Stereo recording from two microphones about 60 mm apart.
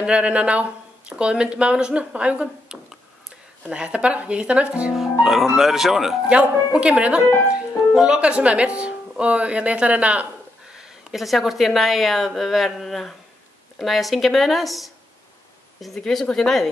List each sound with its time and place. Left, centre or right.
0.0 s speech: centre
4.9 s speech: centre
6.2 s speech: centre
10.8 s a woman's voice: centre